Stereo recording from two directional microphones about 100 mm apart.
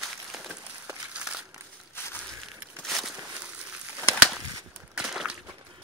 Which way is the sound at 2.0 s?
25° left (ahead or behind).